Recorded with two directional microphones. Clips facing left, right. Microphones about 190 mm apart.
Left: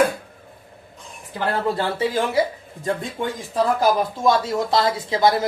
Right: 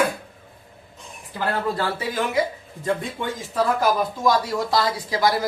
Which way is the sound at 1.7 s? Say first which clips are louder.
Left 3 dB; 25° left (ahead or behind).